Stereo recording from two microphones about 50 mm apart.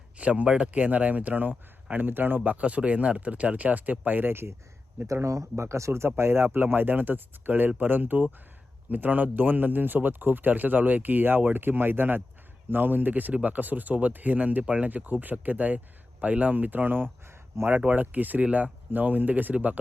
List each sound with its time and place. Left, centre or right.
0.2 s speech: right
4.3 s speech: right
5.0 s speech: right
6.1 s speech: right
14.6 s speech: right
14.8 s speech: right